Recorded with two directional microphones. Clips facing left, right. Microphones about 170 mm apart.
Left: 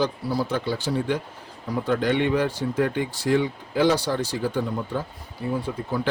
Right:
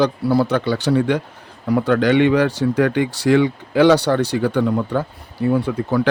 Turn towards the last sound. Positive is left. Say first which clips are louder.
# right 8 dB
turn(degrees=-70)  # may be behind; listen again after turning